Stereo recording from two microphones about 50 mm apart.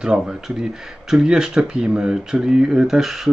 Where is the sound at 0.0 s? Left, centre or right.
Centre.